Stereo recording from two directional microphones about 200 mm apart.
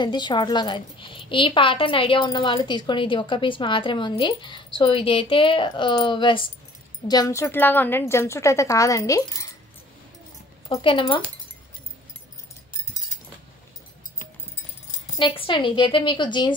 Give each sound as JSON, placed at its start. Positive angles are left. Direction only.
{"t": 0.0, "sound": "a woman's voice", "side_deg": 20}
{"t": 10.7, "sound": "a woman's voice", "side_deg": 25}
{"t": 15.1, "sound": "a woman's voice", "side_deg": 25}